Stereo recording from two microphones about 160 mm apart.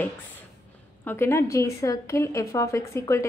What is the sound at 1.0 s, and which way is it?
A woman's voice, 15° left (ahead or behind).